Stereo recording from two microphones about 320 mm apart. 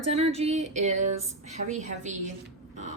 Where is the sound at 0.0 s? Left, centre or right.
Centre.